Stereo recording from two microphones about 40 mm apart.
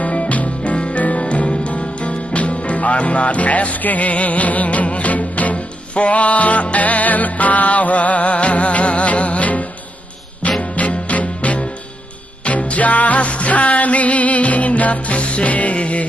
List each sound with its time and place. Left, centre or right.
0.0 s music: left